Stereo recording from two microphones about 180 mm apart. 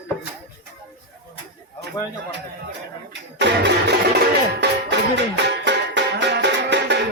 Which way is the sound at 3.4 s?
75° right (ahead or behind).